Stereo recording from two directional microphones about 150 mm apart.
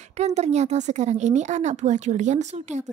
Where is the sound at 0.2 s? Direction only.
50° right (ahead or behind).